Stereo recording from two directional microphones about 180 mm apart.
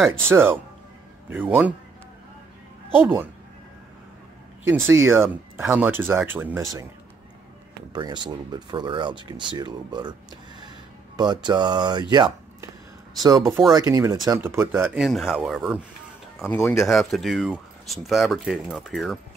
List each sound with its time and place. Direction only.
0.3 s speech: 15° right (ahead or behind)
3.0 s speech: 10° right (ahead or behind)
4.8 s speech: 15° right (ahead or behind)
7.9 s speech: 25° right (ahead or behind)
11.1 s speech: 25° right (ahead or behind)
15.0 s speech: centre (ahead or behind)
16.4 s speech: 10° left (ahead or behind)